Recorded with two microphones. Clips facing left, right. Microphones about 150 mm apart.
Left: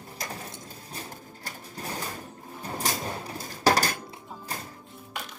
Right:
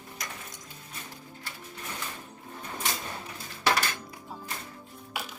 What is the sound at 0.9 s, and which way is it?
Pigeon, 35° left (ahead or behind).